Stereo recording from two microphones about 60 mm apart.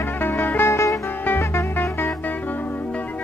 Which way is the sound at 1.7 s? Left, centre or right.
Left.